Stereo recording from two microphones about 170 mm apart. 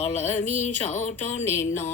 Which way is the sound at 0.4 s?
45° left (ahead or behind).